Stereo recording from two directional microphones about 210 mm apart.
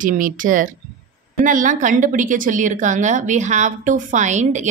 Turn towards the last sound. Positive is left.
turn(degrees=-35)  # may be behind; listen again after turning